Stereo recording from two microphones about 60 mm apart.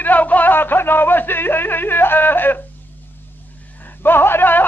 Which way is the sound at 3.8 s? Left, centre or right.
Left.